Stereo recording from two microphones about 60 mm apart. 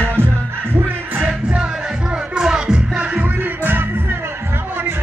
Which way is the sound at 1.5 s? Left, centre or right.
Centre.